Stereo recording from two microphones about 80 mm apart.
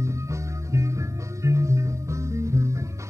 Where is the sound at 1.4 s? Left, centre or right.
Right.